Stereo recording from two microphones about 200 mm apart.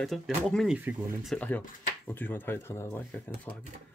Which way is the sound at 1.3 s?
10° left (ahead or behind).